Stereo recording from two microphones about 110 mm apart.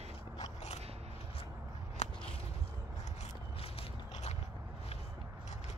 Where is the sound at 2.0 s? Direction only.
90° left.